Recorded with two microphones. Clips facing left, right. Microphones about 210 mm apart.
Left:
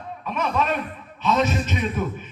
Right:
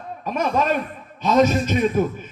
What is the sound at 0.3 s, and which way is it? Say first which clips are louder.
A man's voice: right 3 dB; 40° right (ahead or behind).